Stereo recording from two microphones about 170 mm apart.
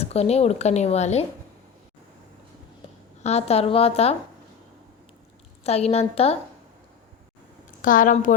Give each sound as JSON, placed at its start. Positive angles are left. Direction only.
{"t": 0.0, "sound": "speech", "side_deg": 40}
{"t": 3.2, "sound": "speech", "side_deg": 40}
{"t": 5.6, "sound": "speech", "side_deg": 40}
{"t": 7.8, "sound": "a woman's voice", "side_deg": 50}